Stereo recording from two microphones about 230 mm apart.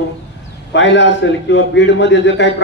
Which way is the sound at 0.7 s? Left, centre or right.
Left.